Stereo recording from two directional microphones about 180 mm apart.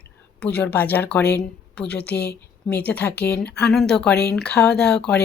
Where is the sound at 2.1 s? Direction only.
65° left (ahead or behind).